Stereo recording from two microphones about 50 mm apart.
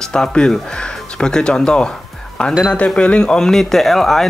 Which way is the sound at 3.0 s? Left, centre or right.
Centre.